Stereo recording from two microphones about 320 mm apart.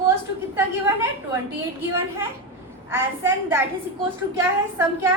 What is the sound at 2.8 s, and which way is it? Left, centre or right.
A woman's voice, centre.